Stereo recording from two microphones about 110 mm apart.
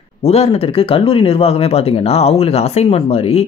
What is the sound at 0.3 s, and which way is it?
Speech, 65° left (ahead or behind).